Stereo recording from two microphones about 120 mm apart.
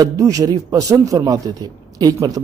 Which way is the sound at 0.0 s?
30° right (ahead or behind).